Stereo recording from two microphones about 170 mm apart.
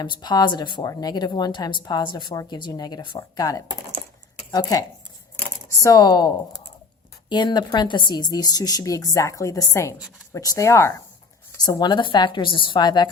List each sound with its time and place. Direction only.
0.0 s speech: 25° left (ahead or behind)